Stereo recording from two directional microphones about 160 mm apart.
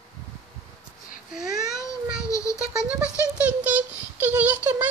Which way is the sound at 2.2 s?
20° left (ahead or behind).